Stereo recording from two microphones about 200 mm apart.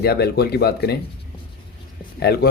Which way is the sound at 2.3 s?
50° left (ahead or behind).